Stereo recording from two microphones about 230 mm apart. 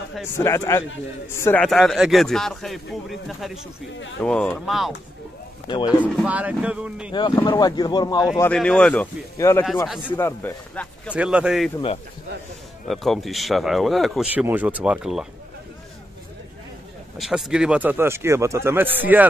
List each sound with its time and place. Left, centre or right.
0.4 s speech: centre
5.7 s a man's voice: centre
5.9 s speech: centre
7.1 s speech: centre
8.4 s speech: centre
11.1 s speech: centre
12.8 s speech: centre
17.2 s speech: centre